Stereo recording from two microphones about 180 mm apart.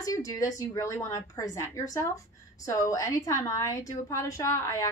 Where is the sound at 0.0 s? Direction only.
20° left (ahead or behind).